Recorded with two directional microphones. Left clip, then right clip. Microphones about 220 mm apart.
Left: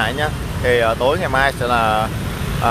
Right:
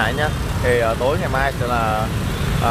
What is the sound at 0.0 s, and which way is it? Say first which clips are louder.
Speech: even; 10° left (ahead or behind).